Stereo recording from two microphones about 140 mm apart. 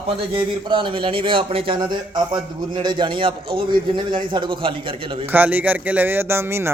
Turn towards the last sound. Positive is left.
turn(degrees=-15)  # may be behind; listen again after turning